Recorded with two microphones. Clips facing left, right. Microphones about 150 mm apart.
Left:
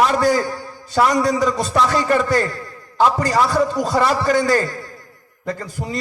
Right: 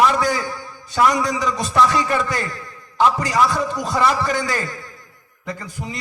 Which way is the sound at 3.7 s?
30° left (ahead or behind).